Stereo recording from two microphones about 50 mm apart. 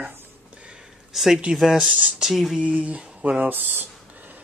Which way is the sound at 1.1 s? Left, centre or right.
Centre.